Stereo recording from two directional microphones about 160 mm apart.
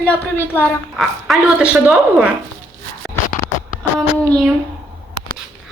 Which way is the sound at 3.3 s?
60° left (ahead or behind).